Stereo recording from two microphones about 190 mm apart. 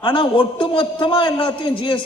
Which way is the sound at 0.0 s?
25° left (ahead or behind).